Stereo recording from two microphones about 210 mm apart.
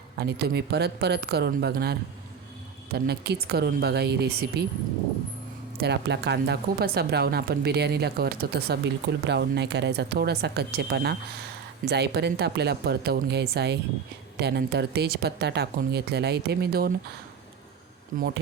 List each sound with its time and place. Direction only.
0.2 s speech: 50° right (ahead or behind)
5.8 s speech: 55° right (ahead or behind)